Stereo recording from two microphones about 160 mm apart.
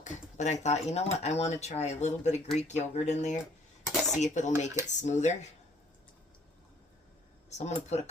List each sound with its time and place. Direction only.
0.0 s speech: 45° left (ahead or behind)
3.8 s dishes: centre (ahead or behind)
4.2 s speech: 45° left (ahead or behind)
7.6 s speech: 45° left (ahead or behind)